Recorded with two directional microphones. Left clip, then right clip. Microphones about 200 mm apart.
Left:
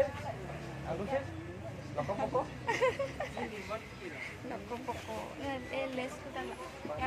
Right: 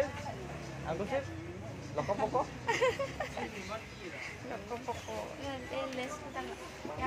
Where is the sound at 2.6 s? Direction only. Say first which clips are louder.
Even; centre (ahead or behind).